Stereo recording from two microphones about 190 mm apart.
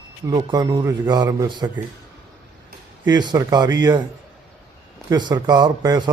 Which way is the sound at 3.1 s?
20° right (ahead or behind).